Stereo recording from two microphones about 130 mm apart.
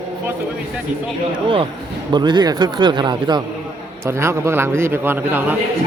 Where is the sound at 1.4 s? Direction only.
40° right (ahead or behind).